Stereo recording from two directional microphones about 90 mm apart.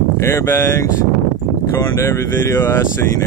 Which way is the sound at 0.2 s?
30° left (ahead or behind).